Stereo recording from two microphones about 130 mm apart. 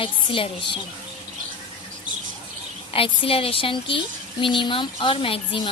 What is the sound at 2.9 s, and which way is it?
A woman's voice, 45° left (ahead or behind).